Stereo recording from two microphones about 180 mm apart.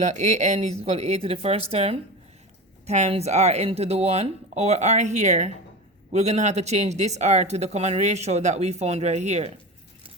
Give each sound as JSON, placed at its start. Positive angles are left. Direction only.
{"t": 0.0, "sound": "speech", "side_deg": -40}